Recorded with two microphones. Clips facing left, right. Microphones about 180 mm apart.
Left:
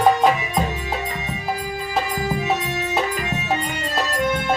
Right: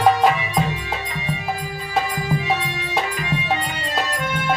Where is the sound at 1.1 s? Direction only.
45° left (ahead or behind).